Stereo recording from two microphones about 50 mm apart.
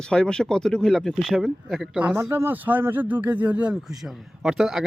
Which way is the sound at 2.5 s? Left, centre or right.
Right.